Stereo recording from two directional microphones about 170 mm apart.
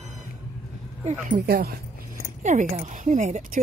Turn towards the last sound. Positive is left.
turn(degrees=-45)  # may be behind; listen again after turning